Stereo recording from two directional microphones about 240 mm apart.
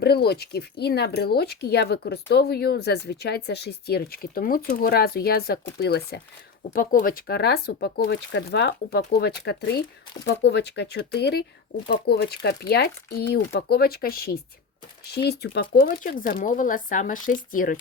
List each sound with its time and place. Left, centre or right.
0.0 s speech: left